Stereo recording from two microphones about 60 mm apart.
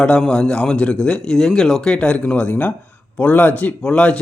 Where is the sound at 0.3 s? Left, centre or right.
Centre.